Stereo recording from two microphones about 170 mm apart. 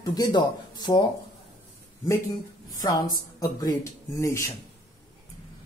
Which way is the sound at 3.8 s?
20° left (ahead or behind).